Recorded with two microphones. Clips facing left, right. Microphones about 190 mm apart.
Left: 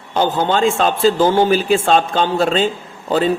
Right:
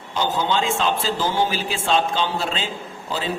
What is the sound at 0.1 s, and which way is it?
A man's voice, 55° left (ahead or behind).